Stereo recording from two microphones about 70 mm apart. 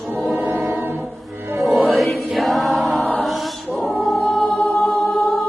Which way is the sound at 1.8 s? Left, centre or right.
Centre.